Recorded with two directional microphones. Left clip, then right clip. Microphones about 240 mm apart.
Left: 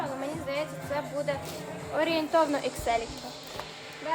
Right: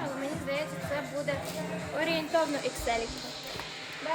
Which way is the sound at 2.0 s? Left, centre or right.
Left.